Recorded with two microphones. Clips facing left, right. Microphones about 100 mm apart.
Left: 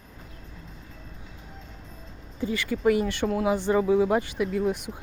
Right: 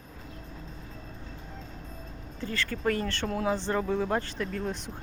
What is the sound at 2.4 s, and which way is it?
Speech, 10° left (ahead or behind).